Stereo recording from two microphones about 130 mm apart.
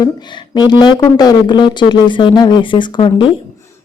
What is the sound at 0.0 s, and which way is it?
Speech, 35° left (ahead or behind).